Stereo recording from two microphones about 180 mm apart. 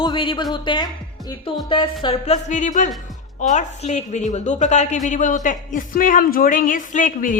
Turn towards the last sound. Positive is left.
turn(degrees=45)  # may be behind; listen again after turning